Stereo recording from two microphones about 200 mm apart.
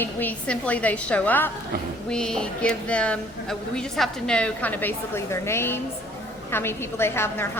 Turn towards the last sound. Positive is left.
turn(degrees=10)  # may be behind; listen again after turning